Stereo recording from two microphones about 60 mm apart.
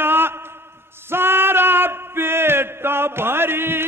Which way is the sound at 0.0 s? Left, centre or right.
Right.